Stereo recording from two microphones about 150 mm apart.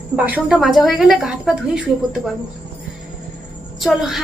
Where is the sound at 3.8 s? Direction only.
Centre (ahead or behind).